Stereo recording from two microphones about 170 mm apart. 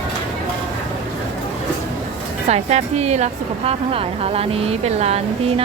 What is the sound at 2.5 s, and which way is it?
A woman's voice, 40° right (ahead or behind).